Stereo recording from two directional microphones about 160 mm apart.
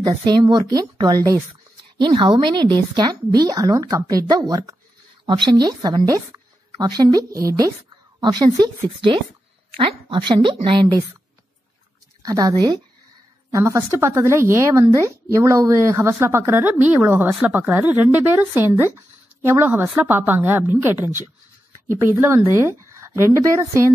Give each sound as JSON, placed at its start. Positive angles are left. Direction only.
{"t": 0.2, "sound": "a woman's voice", "side_deg": -25}
{"t": 12.2, "sound": "a woman's voice", "side_deg": -20}